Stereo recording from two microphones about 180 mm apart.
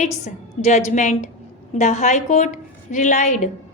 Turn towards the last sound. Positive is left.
turn(degrees=45)  # may be behind; listen again after turning